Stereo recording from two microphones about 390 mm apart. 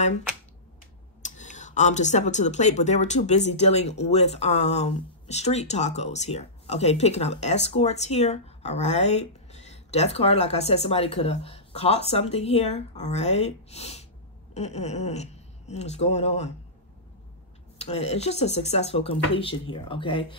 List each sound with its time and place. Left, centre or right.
1.2 s speech: centre
17.7 s speech: centre